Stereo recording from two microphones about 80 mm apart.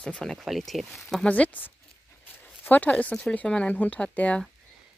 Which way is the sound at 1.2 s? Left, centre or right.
Centre.